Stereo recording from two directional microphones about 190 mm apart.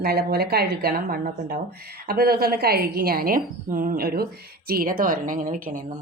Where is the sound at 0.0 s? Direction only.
55° right (ahead or behind).